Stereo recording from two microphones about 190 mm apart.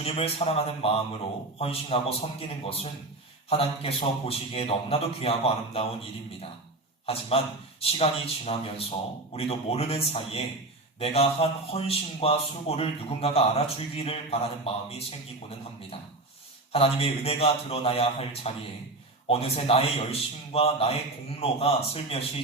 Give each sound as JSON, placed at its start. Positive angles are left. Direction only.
{"t": 0.0, "sound": "a man's voice", "side_deg": 30}
{"t": 7.0, "sound": "a man's voice", "side_deg": 30}
{"t": 16.7, "sound": "a man's voice", "side_deg": 30}